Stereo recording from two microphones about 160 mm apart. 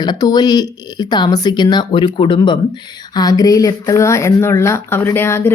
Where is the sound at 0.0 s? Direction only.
25° left (ahead or behind).